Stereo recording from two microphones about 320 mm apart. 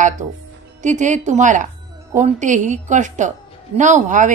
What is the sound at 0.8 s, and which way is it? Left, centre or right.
Speech, right.